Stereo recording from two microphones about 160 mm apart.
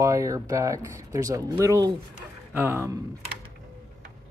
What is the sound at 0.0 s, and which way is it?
Speech, 20° right (ahead or behind).